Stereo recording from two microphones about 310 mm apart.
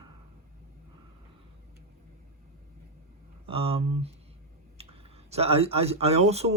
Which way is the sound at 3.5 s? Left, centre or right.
Centre.